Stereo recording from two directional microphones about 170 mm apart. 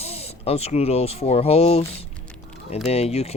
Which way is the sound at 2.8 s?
35° left (ahead or behind).